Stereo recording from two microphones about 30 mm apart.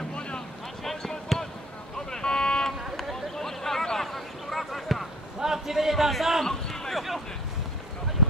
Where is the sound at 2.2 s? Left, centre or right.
Left.